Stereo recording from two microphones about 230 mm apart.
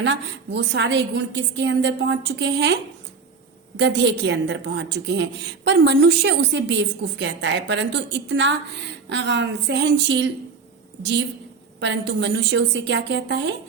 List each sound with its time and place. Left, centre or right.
0.0 s a woman's voice: right
3.8 s a woman's voice: right